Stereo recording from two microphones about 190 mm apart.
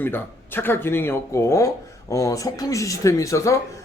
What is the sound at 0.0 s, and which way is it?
Speech, 10° left (ahead or behind).